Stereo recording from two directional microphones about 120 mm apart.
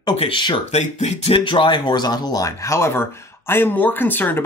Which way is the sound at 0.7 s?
70° left (ahead or behind).